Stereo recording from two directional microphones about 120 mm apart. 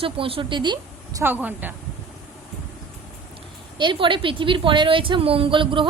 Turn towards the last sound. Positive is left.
turn(degrees=-45)  # may be behind; listen again after turning